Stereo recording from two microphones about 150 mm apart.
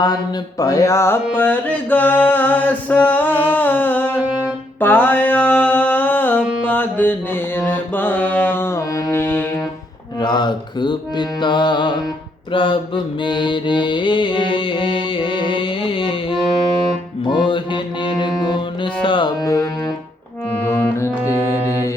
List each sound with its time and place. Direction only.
0.6 s a sound: 25° left (ahead or behind)
4.8 s mantra: 10° left (ahead or behind)
10.2 s music: 30° left (ahead or behind)
12.5 s mantra: 35° left (ahead or behind)
17.3 s music: 35° left (ahead or behind)
20.7 s music: 15° left (ahead or behind)
21.2 s mantra: 15° right (ahead or behind)